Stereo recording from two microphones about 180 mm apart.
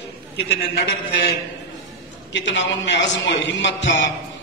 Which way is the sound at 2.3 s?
90° left.